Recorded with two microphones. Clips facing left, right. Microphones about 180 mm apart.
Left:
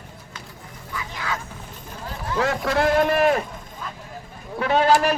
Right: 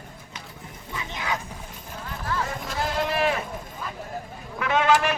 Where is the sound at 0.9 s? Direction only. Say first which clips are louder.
Even; 20° right (ahead or behind).